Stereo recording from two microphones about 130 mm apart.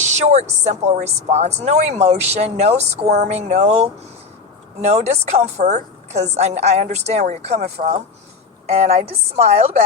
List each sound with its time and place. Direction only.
0.0 s a woman's voice: 60° right (ahead or behind)